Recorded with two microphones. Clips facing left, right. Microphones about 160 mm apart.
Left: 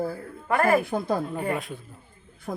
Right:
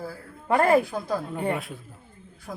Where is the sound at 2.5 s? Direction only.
45° left (ahead or behind).